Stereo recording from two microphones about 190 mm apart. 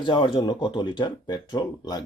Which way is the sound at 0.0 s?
25° left (ahead or behind).